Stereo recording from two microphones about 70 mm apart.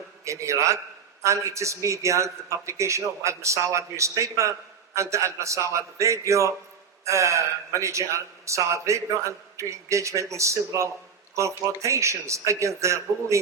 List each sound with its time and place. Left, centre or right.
0.3 s a man's voice: right